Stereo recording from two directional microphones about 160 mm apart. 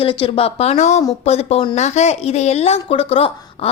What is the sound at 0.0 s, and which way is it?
A woman's voice, 30° left (ahead or behind).